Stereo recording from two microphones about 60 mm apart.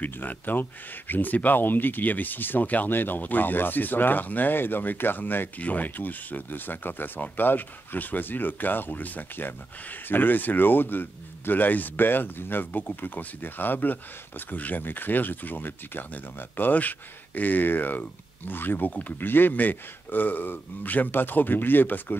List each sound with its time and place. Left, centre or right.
0.0 s speech: left